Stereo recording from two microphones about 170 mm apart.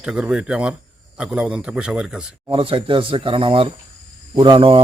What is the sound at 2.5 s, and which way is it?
Speech, 30° right (ahead or behind).